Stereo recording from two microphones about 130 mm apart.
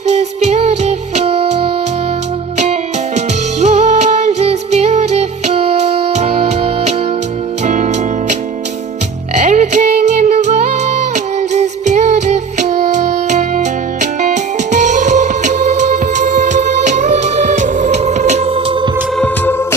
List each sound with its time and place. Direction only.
0.1 s music: 55° right (ahead or behind)
3.2 s music: 60° right (ahead or behind)
7.6 s music: 65° right (ahead or behind); by 18.9 s 45° right (ahead or behind)